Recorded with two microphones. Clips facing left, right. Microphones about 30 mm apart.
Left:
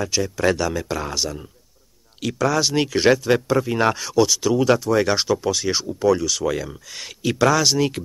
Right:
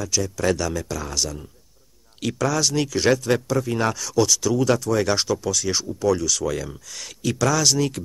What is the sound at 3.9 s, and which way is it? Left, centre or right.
Speech, left.